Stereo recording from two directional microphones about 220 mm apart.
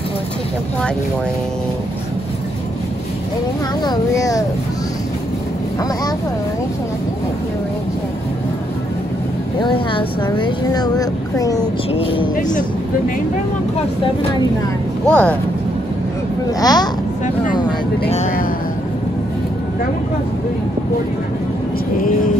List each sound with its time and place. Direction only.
3.8 s a child's voice: 15° left (ahead or behind)
9.6 s speech: 20° left (ahead or behind)
15.0 s speech: 5° left (ahead or behind)
16.5 s a child's voice: 20° left (ahead or behind)
18.1 s speech: 35° left (ahead or behind)